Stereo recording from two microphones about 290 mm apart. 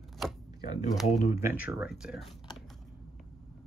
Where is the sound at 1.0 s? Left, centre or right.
Left.